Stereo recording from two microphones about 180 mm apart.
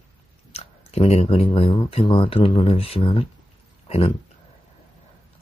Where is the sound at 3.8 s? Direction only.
35° left (ahead or behind).